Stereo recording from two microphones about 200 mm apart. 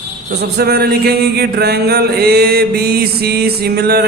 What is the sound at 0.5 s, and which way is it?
Mantra, 50° right (ahead or behind).